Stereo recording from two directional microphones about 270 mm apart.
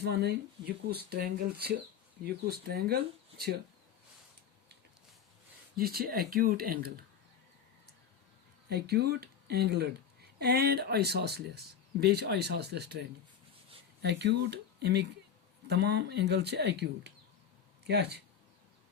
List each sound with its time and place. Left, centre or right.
0.0 s a woman's voice: right
5.7 s a woman's voice: right
8.7 s a woman's voice: right